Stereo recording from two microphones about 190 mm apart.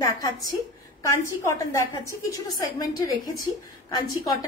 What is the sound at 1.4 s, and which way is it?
A woman's voice, 15° left (ahead or behind).